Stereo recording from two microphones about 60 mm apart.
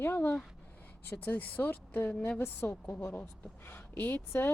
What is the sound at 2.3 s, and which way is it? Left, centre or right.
A woman's voice, left.